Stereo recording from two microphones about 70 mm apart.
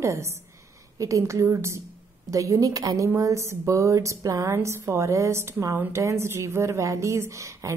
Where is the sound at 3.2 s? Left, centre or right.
Right.